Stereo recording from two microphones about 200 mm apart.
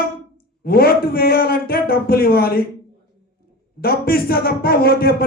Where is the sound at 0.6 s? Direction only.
50° left (ahead or behind).